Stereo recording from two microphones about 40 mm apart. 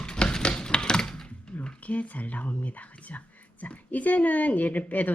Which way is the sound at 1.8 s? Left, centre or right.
Left.